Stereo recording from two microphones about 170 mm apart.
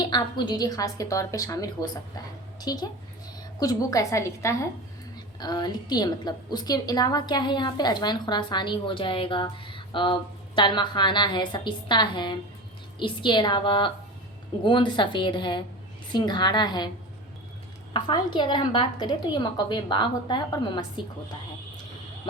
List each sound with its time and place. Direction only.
0.0 s a woman's voice: 25° left (ahead or behind)
17.9 s a woman's voice: 25° left (ahead or behind)